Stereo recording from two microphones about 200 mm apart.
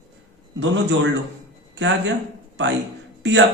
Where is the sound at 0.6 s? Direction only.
65° right (ahead or behind).